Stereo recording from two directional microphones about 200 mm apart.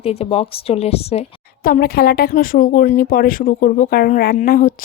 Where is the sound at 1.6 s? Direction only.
50° left (ahead or behind).